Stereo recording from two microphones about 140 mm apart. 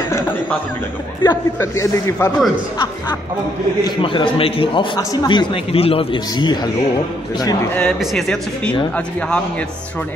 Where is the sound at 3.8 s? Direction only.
35° left (ahead or behind).